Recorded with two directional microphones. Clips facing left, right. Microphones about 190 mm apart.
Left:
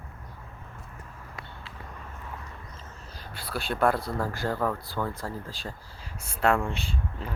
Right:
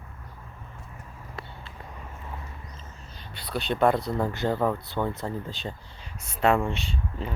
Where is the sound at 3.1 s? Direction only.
5° left (ahead or behind).